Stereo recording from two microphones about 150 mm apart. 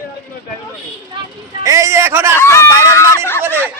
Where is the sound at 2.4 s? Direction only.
20° left (ahead or behind).